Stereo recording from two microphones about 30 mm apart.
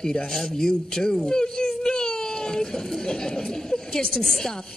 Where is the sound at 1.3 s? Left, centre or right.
Left.